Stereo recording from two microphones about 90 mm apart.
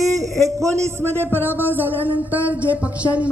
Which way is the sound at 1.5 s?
20° right (ahead or behind).